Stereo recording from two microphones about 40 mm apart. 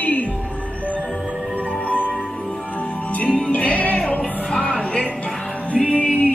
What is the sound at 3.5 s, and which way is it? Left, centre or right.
Music, left.